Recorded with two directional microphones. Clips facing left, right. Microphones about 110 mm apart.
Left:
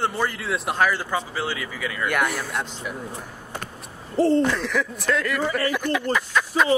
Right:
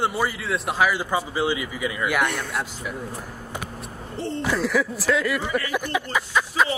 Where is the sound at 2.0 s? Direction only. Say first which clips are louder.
Left 1 dB; centre (ahead or behind).